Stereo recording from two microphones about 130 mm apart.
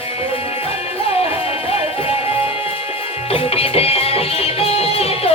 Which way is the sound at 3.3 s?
50° left (ahead or behind).